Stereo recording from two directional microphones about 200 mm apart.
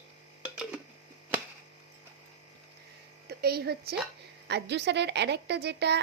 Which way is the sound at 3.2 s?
50° right (ahead or behind).